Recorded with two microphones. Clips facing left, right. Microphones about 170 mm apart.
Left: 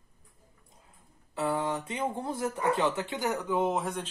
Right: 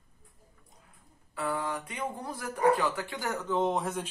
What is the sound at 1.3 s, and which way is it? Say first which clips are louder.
Speech: left 3 dB; 25° left (ahead or behind).